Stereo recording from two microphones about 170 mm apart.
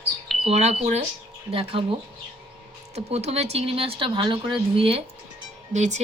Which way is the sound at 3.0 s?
40° right (ahead or behind).